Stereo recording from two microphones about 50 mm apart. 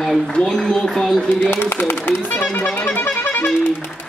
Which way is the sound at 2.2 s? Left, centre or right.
Left.